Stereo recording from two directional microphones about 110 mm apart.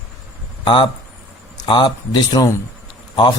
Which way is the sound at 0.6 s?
45° left (ahead or behind).